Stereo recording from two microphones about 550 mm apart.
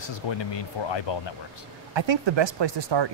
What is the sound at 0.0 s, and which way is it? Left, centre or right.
Speech, left.